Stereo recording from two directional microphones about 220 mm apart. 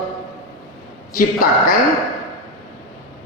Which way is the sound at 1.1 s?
40° left (ahead or behind).